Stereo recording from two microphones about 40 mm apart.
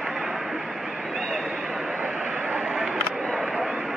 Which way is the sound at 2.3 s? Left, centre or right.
Right.